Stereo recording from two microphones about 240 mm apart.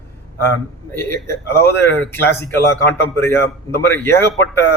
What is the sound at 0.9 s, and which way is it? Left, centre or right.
Speech, centre.